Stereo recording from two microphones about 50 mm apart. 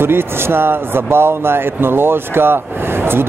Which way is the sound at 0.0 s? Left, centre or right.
Right.